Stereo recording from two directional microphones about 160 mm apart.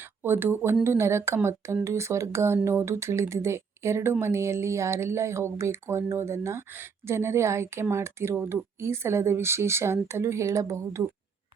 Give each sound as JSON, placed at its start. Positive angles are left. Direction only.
{"t": 0.2, "sound": "speech", "side_deg": -15}